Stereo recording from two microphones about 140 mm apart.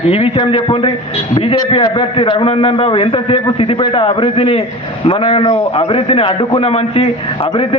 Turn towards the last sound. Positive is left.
turn(degrees=40)  # may be behind; listen again after turning